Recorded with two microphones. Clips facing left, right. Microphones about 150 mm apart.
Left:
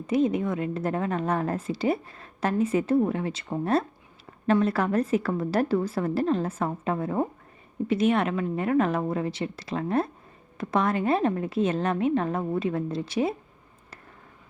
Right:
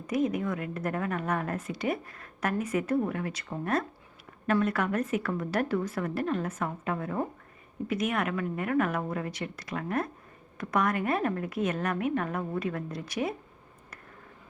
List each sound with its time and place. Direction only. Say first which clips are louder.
0.1 s a woman's voice: left 4 dB; 25° left (ahead or behind)